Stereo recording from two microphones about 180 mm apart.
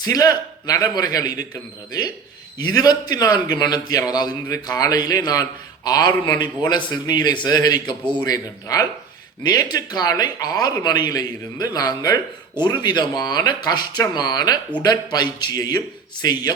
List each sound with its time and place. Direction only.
0.0 s speech: 20° left (ahead or behind)
2.6 s speech: 20° left (ahead or behind)